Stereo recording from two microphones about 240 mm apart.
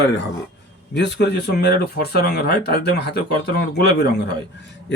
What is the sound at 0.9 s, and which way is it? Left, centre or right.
Speech, left.